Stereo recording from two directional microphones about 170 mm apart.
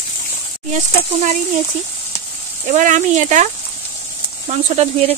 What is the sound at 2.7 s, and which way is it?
Speech, 45° right (ahead or behind).